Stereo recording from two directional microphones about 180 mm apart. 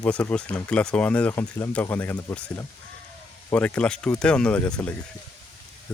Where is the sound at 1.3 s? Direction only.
20° left (ahead or behind).